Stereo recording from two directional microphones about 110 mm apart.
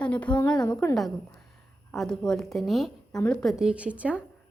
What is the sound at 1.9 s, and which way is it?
A woman's voice, 5° left (ahead or behind).